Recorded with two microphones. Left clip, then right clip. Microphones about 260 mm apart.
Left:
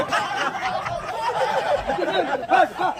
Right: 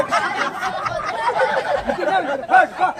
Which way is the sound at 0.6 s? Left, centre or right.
Left.